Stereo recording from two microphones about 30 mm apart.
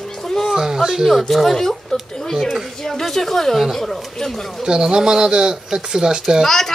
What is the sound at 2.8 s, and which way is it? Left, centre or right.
A child's voice, centre.